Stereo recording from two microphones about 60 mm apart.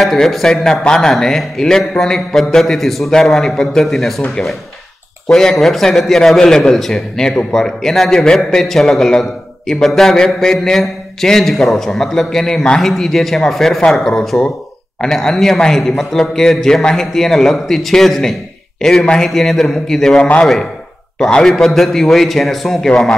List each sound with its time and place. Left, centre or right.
0.0 s a man's voice: centre
4.4 s a man's voice: centre